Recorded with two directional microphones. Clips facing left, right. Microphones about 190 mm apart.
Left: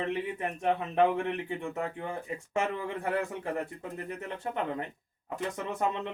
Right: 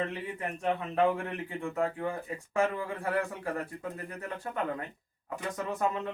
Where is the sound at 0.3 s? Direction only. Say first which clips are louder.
Left 2 dB; 20° left (ahead or behind).